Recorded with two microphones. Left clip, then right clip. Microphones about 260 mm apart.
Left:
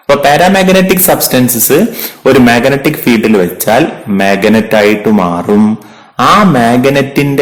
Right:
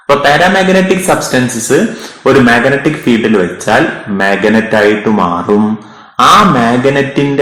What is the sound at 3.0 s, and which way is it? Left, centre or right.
A man's voice, left.